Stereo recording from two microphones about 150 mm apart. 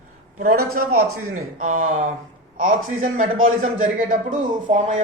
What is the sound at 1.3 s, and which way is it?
A man's voice, 60° right (ahead or behind).